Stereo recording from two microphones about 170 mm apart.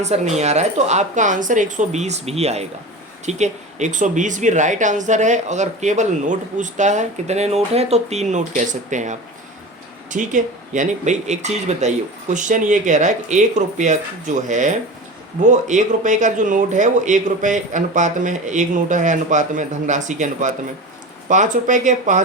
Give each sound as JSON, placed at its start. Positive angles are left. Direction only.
{"t": 0.0, "sound": "speech", "side_deg": -40}